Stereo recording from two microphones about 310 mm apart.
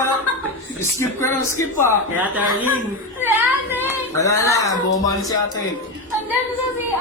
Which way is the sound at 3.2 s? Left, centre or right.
Centre.